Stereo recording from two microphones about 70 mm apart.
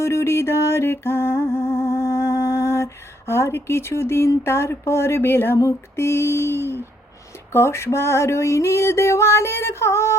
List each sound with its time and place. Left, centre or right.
0.0 s music: left